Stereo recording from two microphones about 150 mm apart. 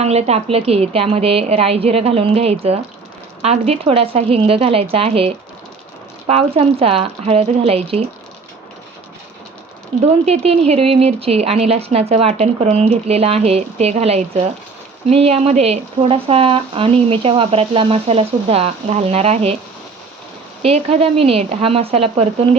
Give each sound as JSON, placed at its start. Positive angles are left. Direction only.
{"t": 0.0, "sound": "speech", "side_deg": -45}
{"t": 10.0, "sound": "speech", "side_deg": -45}
{"t": 20.6, "sound": "speech", "side_deg": -45}